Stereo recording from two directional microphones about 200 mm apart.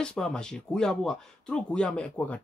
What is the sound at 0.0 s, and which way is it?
Speech, 5° left (ahead or behind).